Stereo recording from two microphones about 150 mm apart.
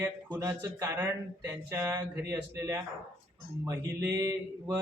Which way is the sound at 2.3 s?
20° right (ahead or behind).